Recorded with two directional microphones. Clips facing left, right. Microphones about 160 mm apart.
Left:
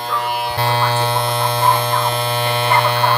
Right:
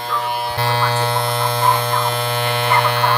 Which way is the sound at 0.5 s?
20° left (ahead or behind).